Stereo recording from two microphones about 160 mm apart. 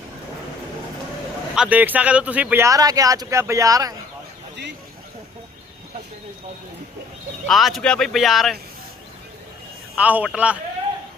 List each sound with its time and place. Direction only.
1.5 s speech: 10° right (ahead or behind)
7.4 s speech: centre (ahead or behind)
10.0 s speech: 10° right (ahead or behind)